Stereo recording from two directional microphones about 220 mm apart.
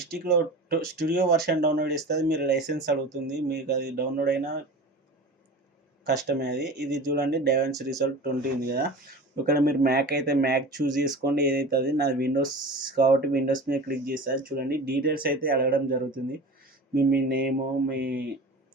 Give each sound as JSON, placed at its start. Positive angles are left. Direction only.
{"t": 0.3, "sound": "speech", "side_deg": -45}
{"t": 6.2, "sound": "speech", "side_deg": -50}
{"t": 7.7, "sound": "speech", "side_deg": 0}
{"t": 8.0, "sound": "speech", "side_deg": -45}
{"t": 12.4, "sound": "speech", "side_deg": -20}
{"t": 12.9, "sound": "speech", "side_deg": -45}